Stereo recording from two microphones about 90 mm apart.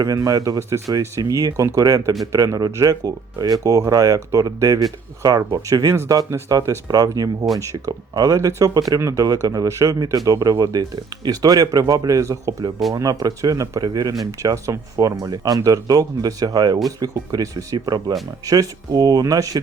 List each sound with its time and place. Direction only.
0.0 s speech: 40° right (ahead or behind)